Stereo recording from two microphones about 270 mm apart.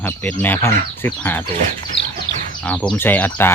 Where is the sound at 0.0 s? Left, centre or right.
Centre.